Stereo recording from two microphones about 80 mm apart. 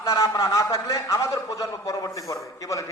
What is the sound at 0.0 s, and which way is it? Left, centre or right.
A man's voice, left.